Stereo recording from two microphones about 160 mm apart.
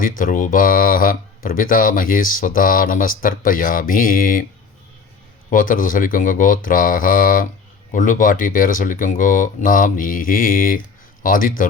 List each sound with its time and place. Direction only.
0.0 s speech: 60° left (ahead or behind)
5.5 s speech: 55° left (ahead or behind)